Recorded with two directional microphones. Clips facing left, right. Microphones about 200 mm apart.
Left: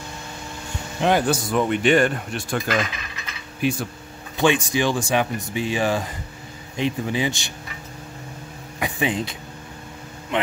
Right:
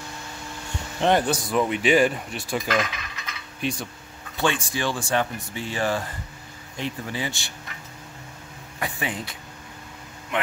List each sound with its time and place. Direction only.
1.0 s speech: centre (ahead or behind)
4.4 s speech: 15° left (ahead or behind)
8.7 s speech: 15° left (ahead or behind)